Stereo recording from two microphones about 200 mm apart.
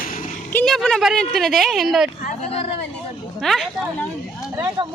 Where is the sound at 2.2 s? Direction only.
30° left (ahead or behind).